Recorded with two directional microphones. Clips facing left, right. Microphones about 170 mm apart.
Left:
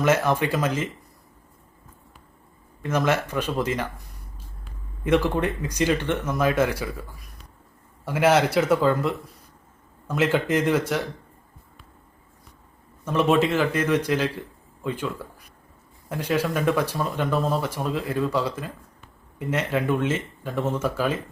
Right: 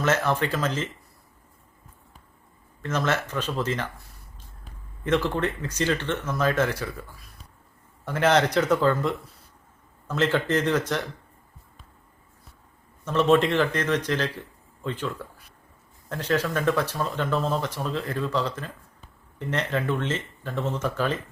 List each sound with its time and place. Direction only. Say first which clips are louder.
0.0 s speech: left 3 dB; 10° left (ahead or behind)
2.8 s speech: left 3 dB; 10° left (ahead or behind)
13.1 s speech: even; 10° left (ahead or behind)